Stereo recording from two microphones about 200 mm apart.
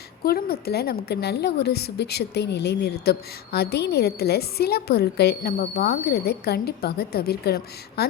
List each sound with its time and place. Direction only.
0.3 s a woman's voice: 50° left (ahead or behind)